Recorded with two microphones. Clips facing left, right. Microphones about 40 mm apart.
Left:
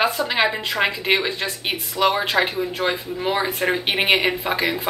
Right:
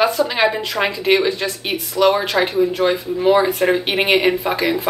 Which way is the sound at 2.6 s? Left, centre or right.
Centre.